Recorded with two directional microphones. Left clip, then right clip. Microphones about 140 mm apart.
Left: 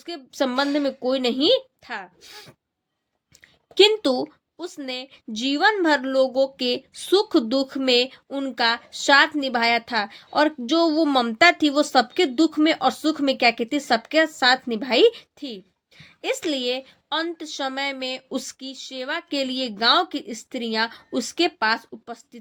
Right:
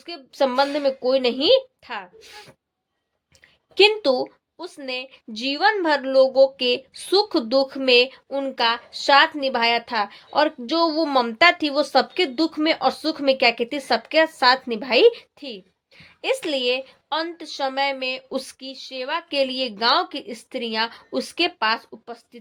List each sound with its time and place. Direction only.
0.0 s a woman's voice: 50° left (ahead or behind)
3.8 s a woman's voice: 50° left (ahead or behind)